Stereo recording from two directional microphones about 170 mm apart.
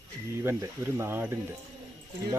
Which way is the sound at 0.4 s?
15° right (ahead or behind).